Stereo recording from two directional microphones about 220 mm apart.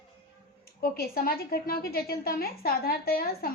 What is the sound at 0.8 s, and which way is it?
A woman's voice, 45° left (ahead or behind).